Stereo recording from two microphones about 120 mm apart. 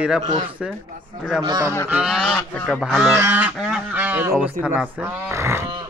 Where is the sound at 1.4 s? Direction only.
35° right (ahead or behind).